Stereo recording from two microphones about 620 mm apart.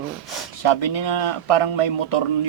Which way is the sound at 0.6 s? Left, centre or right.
Left.